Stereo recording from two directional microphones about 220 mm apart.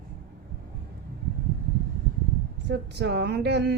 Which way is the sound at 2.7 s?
50° right (ahead or behind).